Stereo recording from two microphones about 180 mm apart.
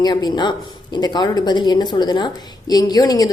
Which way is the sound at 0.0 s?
25° left (ahead or behind).